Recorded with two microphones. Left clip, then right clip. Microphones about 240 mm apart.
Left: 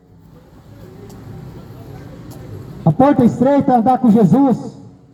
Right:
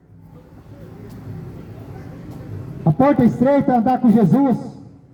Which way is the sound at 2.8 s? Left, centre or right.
Left.